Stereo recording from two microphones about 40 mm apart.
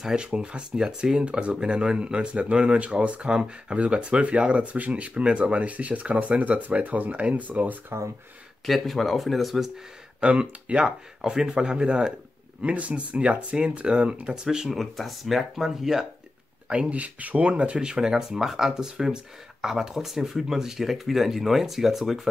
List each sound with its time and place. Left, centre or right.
0.1 s speech: right
0.7 s speech: centre
1.2 s speech: right
8.6 s speech: centre
10.4 s speech: right
11.1 s speech: centre
12.6 s speech: right
14.3 s speech: centre
14.7 s speech: centre
16.6 s speech: right
16.9 s speech: right
17.7 s speech: centre